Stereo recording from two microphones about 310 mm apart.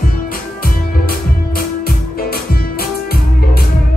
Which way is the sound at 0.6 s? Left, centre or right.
Left.